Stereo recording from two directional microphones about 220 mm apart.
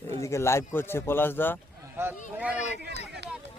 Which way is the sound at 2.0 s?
10° right (ahead or behind).